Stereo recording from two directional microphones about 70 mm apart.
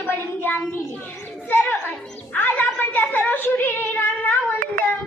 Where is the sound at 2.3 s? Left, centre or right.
Left.